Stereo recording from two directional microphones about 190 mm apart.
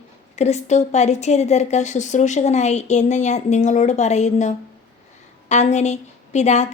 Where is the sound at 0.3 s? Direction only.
35° left (ahead or behind).